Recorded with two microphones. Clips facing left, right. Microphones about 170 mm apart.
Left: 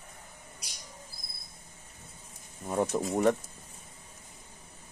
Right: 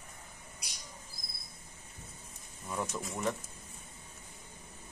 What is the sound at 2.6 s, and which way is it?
Speech, 35° left (ahead or behind).